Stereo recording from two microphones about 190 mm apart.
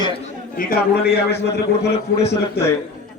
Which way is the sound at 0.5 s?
50° left (ahead or behind).